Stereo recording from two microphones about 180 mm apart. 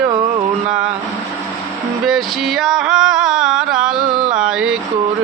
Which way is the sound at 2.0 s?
Centre (ahead or behind).